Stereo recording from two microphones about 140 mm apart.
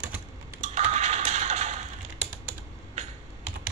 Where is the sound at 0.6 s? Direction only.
55° right (ahead or behind).